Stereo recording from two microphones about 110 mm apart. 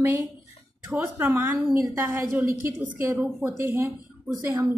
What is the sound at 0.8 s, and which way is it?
Speech, 20° right (ahead or behind).